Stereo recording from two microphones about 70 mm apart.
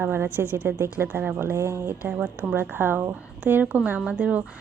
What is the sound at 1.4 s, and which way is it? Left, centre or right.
Speech, right.